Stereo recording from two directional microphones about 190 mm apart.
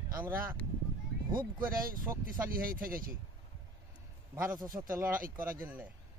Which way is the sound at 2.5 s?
50° right (ahead or behind).